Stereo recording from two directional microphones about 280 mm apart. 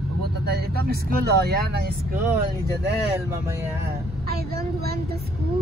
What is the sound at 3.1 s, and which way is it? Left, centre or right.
Speech, centre.